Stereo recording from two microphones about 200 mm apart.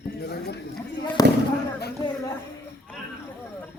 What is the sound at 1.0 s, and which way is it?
Speech, 20° left (ahead or behind).